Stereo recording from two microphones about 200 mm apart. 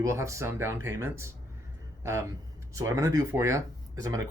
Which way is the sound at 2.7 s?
15° right (ahead or behind).